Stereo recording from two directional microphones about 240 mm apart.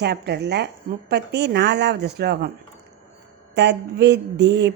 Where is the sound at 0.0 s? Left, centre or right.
Right.